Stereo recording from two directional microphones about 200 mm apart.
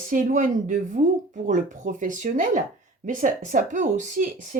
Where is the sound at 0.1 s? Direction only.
40° right (ahead or behind).